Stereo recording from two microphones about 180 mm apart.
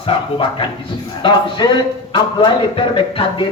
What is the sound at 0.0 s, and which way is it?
A man's voice, 30° left (ahead or behind).